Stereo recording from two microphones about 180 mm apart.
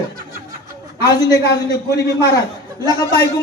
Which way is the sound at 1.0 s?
20° left (ahead or behind).